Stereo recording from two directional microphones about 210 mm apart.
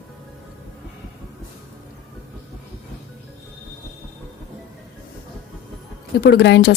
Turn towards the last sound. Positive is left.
turn(degrees=55)  # may be behind; listen again after turning